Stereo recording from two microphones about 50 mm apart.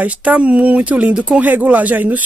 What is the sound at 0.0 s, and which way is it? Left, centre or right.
Speech, right.